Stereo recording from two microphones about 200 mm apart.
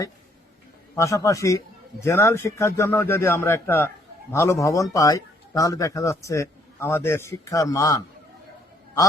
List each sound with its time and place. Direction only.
0.9 s a man's voice: 15° left (ahead or behind)